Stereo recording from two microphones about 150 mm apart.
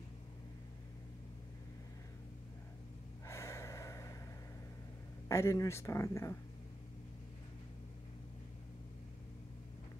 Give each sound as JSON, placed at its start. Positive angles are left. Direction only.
{"t": 3.3, "sound": "gasp", "side_deg": 20}
{"t": 5.3, "sound": "speech", "side_deg": 20}